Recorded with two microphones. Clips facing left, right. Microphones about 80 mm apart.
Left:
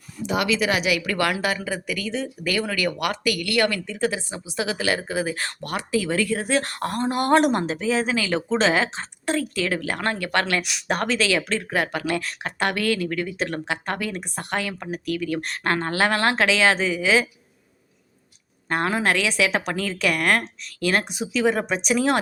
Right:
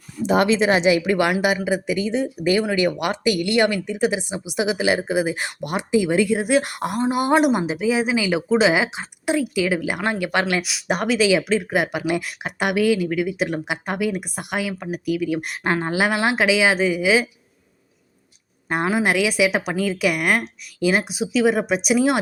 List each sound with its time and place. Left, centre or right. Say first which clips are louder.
0.3 s a woman's voice: right 5 dB; right; by 10.6 s centre
10.6 s speech: right 2 dB; centre
18.7 s speech: right 2 dB; centre